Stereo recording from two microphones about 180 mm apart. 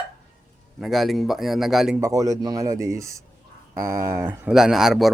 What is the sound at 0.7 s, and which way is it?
Speech, centre (ahead or behind).